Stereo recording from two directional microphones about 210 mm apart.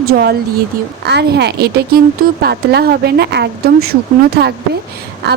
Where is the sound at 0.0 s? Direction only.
45° right (ahead or behind).